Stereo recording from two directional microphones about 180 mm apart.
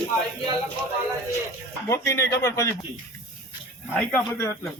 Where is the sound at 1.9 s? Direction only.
15° left (ahead or behind).